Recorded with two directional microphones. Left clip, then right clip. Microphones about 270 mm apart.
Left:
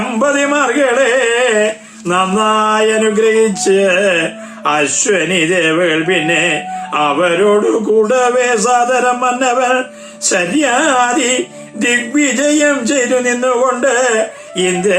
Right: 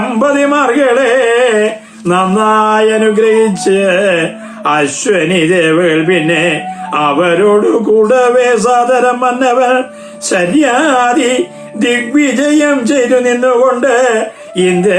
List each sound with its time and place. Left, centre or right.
0.1 s music: centre